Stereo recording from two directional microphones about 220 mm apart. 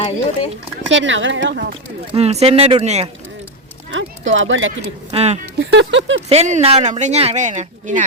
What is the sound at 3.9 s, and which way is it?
Speech, 60° right (ahead or behind).